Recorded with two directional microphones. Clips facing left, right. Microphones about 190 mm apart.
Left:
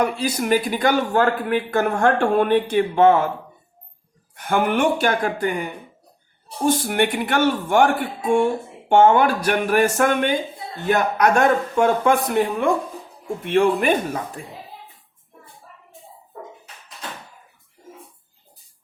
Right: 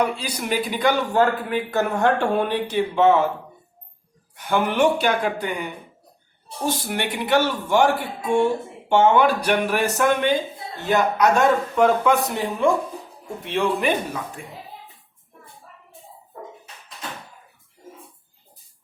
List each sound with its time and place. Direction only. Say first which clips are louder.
0.0 s a man's voice: left 3 dB; 50° left (ahead or behind)
4.4 s a man's voice: even; 50° left (ahead or behind)